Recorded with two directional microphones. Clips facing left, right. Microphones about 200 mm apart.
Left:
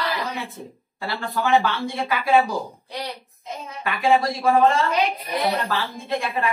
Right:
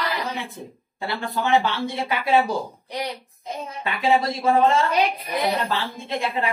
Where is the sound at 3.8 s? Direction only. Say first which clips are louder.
Left 1 dB; 20° right (ahead or behind).